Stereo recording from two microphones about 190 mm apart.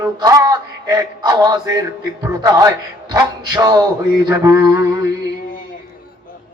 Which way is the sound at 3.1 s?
20° right (ahead or behind).